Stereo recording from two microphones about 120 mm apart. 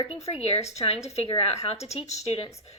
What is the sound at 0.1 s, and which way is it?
A woman's voice, 60° left (ahead or behind).